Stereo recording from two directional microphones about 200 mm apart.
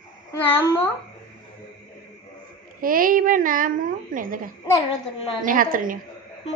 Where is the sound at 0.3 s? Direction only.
10° left (ahead or behind).